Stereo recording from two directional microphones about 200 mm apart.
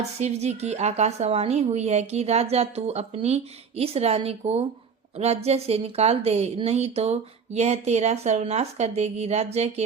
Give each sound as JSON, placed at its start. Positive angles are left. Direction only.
{"t": 0.0, "sound": "a woman's voice", "side_deg": -35}